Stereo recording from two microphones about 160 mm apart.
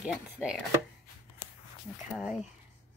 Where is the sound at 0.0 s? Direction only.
5° right (ahead or behind).